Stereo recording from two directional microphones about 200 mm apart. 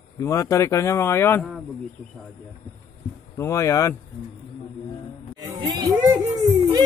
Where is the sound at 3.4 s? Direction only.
15° left (ahead or behind).